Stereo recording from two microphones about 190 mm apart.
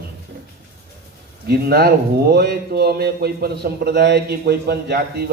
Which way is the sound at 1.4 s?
55° right (ahead or behind).